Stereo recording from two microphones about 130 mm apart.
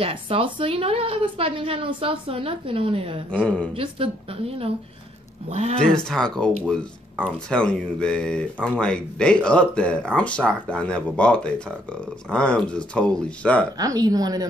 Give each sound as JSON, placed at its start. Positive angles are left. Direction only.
{"t": 0.0, "sound": "a woman's voice", "side_deg": -45}
{"t": 3.4, "sound": "speech", "side_deg": 10}
{"t": 3.7, "sound": "a woman's voice", "side_deg": -45}
{"t": 5.9, "sound": "speech", "side_deg": 5}
{"t": 13.7, "sound": "speech", "side_deg": -30}